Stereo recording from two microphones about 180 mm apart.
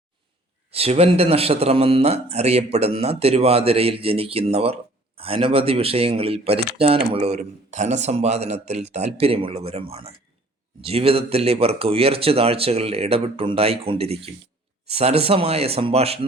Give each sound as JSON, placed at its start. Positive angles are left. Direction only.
{"t": 0.7, "sound": "a man's voice", "side_deg": -35}